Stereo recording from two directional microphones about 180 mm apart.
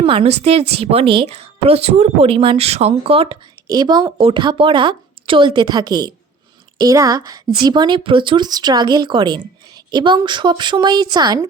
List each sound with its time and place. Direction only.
0.0 s a woman's voice: 30° right (ahead or behind)